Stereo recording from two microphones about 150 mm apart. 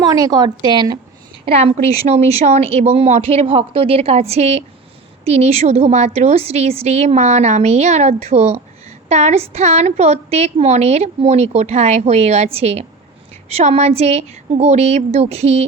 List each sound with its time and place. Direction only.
0.0 s a woman's voice: 25° right (ahead or behind)
1.5 s a woman's voice: 45° right (ahead or behind)